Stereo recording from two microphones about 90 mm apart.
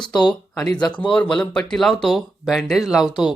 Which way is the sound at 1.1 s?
10° left (ahead or behind).